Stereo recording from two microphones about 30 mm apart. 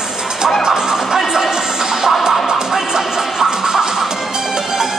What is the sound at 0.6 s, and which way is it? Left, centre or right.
Music, centre.